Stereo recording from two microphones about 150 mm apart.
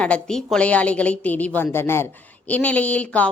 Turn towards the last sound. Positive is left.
turn(degrees=10)  # may be behind; listen again after turning